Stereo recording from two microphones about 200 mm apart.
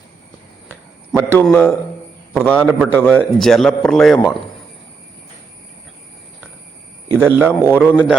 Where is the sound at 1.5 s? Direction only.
5° left (ahead or behind).